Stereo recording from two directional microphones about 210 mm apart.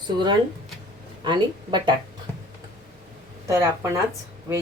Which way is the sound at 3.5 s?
15° right (ahead or behind).